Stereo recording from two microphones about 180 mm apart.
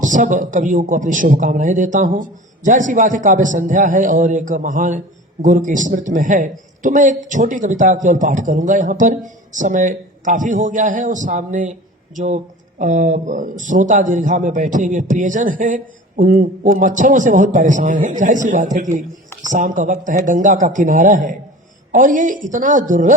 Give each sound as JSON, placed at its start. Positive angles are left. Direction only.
{"t": 0.0, "sound": "a man's voice", "side_deg": -45}